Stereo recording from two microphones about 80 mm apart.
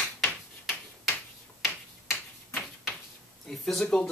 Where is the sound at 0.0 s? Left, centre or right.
Centre.